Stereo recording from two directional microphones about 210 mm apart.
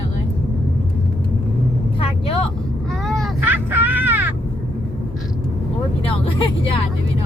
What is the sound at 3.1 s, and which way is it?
Vehicle, 5° right (ahead or behind).